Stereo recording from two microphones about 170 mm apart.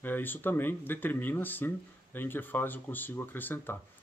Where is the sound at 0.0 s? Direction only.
10° left (ahead or behind).